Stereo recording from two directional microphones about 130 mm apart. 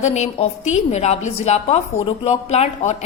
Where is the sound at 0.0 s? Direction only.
60° left (ahead or behind).